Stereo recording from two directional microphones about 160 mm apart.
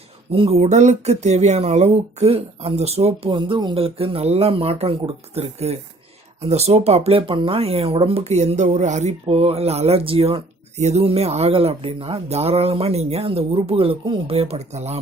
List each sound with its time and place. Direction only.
0.3 s speech: 35° right (ahead or behind)
3.2 s speech: 30° right (ahead or behind)